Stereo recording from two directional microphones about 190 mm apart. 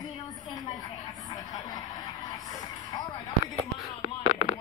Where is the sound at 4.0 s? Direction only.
35° left (ahead or behind).